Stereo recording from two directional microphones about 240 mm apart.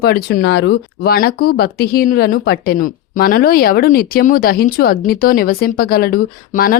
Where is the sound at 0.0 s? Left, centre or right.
Left.